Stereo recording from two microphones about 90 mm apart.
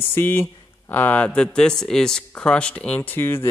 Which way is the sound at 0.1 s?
25° left (ahead or behind).